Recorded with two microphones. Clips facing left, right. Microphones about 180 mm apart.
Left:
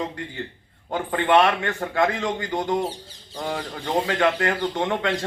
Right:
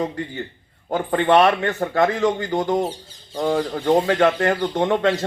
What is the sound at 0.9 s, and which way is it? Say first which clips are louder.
Speech: right 4 dB; 40° right (ahead or behind).